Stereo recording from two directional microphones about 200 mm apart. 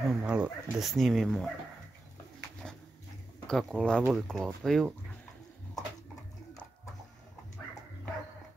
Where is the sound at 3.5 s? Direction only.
Centre (ahead or behind).